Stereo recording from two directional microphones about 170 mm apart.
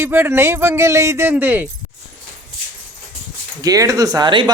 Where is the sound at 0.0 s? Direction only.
15° right (ahead or behind).